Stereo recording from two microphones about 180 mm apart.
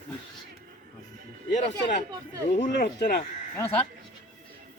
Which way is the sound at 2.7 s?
60° left (ahead or behind).